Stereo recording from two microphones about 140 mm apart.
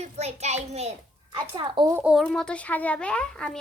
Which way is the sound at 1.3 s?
30° right (ahead or behind).